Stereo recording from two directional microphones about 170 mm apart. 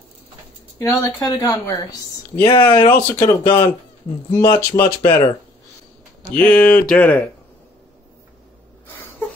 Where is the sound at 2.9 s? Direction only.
15° left (ahead or behind).